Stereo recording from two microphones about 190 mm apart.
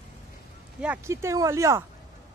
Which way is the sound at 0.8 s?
10° right (ahead or behind).